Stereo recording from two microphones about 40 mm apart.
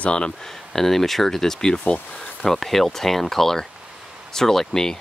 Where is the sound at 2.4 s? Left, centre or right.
Centre.